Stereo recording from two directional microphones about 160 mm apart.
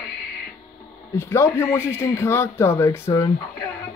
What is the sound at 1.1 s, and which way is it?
Speech, 15° left (ahead or behind).